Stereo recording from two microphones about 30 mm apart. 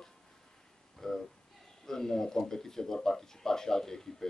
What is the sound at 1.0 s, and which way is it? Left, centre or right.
Speech, centre.